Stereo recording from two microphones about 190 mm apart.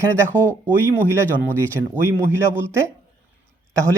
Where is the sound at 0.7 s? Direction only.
15° right (ahead or behind).